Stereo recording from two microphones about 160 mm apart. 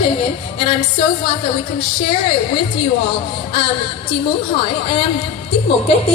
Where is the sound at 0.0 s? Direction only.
35° left (ahead or behind).